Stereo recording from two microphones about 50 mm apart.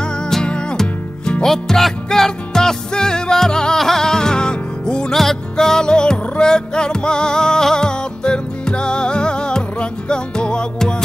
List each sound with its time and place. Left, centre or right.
0.3 s music: centre
5.1 s music: centre